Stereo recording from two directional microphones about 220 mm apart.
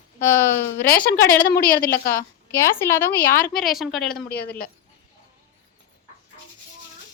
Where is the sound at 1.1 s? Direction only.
40° left (ahead or behind).